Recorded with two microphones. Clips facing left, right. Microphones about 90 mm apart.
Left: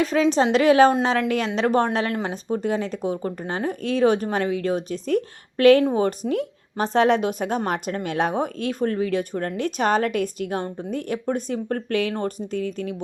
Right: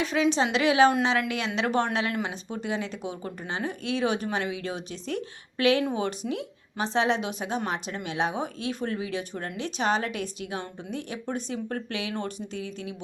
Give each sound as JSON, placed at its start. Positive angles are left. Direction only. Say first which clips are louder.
{"t": 0.0, "sound": "speech", "louder": "left 5 dB", "side_deg": 40}